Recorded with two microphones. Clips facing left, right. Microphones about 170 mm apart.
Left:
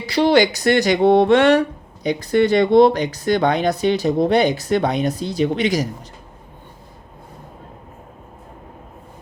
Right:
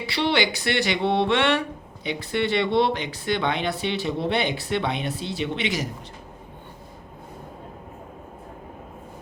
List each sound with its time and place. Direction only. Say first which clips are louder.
0.0 s speech: left 8 dB; 40° left (ahead or behind)